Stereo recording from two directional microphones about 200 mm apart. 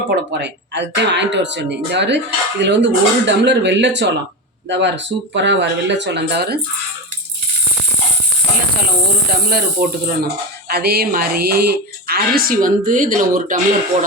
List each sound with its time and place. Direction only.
0.4 s speech: 60° right (ahead or behind)
9.5 s speech: 45° right (ahead or behind)